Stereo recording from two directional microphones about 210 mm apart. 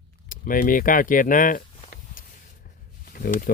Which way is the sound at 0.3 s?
40° left (ahead or behind).